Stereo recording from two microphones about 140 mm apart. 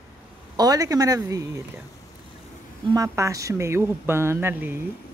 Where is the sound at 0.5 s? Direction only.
25° right (ahead or behind).